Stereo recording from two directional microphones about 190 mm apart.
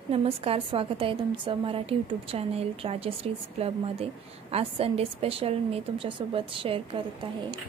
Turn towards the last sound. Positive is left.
turn(degrees=-30)  # may be behind; listen again after turning